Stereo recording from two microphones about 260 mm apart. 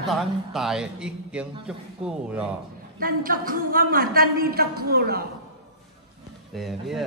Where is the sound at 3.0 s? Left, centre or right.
Right.